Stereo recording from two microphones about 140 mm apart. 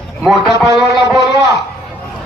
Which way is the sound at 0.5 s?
25° right (ahead or behind).